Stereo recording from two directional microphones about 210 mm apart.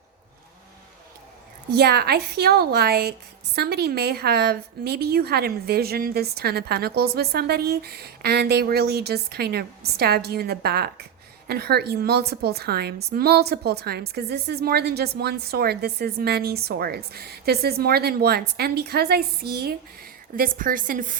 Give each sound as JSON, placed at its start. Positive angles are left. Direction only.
{"t": 1.7, "sound": "a woman's voice", "side_deg": -50}